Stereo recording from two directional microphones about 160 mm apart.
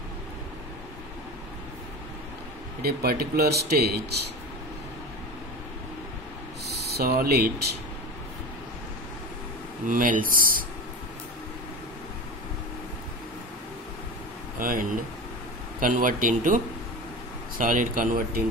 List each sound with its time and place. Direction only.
2.8 s speech: 75° right (ahead or behind)
6.7 s speech: 80° right
9.8 s speech: 55° right (ahead or behind)
14.6 s speech: 60° right (ahead or behind)